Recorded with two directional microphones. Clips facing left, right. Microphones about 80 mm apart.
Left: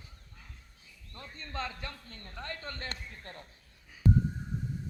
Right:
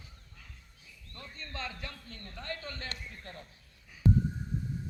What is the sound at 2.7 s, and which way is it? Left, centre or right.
Speech, left.